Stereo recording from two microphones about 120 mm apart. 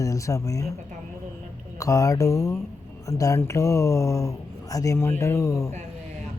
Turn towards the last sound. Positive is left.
turn(degrees=25)  # may be behind; listen again after turning